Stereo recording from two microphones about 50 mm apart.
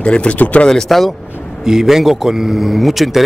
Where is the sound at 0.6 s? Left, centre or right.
Centre.